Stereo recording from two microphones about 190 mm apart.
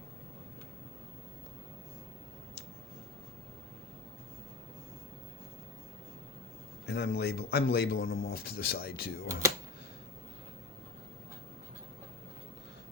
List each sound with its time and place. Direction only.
6.8 s a man's voice: 60° left (ahead or behind)